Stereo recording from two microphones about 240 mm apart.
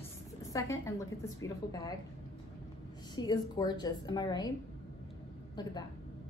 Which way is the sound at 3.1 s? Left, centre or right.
Centre.